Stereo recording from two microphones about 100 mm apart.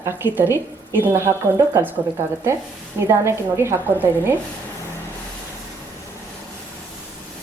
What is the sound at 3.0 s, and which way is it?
A woman's voice, 25° right (ahead or behind).